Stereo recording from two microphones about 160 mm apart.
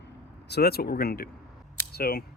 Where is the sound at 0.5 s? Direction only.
75° left (ahead or behind).